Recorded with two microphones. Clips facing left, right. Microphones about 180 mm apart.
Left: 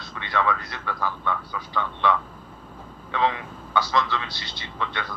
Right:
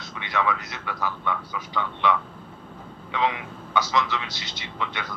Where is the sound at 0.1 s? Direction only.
10° right (ahead or behind).